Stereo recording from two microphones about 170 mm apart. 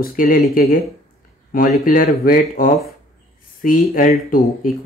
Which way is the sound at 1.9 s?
55° left (ahead or behind).